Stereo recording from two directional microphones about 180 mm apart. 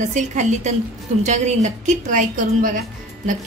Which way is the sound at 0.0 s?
40° right (ahead or behind).